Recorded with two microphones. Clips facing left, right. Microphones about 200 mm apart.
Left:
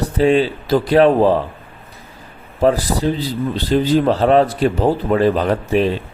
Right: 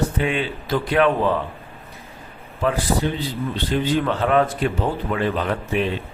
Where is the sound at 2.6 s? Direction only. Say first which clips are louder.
Left 6 dB; 35° left (ahead or behind).